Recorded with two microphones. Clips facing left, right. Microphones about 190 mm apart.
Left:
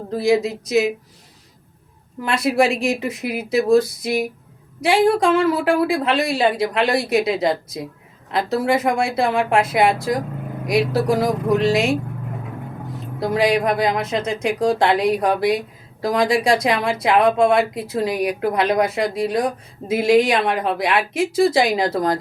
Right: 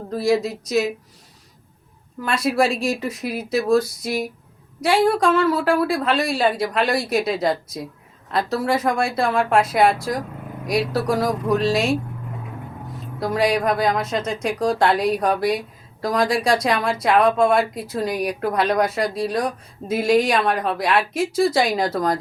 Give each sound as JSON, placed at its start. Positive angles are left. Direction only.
{"t": 0.1, "sound": "speech", "side_deg": 20}
{"t": 2.2, "sound": "speech", "side_deg": 20}
{"t": 13.1, "sound": "speech", "side_deg": 25}